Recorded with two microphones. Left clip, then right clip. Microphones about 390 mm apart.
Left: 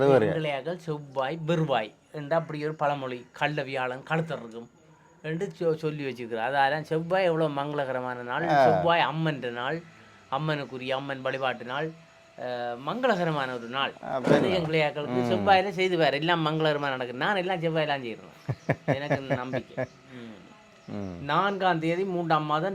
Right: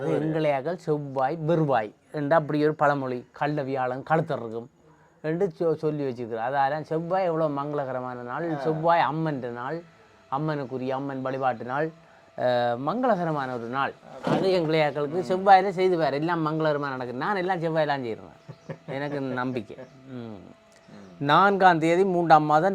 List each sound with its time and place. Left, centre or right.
0.0 s speech: left
0.3 s speech: right
5.2 s speech: right
8.9 s speech: right
12.4 s speech: right
12.9 s speech: right
18.5 s a sound: left
18.9 s speech: right
21.2 s speech: right